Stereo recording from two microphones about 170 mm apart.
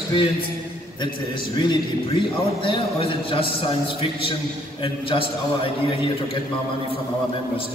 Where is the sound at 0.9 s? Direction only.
25° left (ahead or behind).